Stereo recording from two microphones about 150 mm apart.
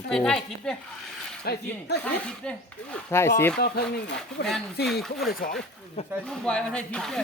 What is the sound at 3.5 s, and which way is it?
Speech, 90° left.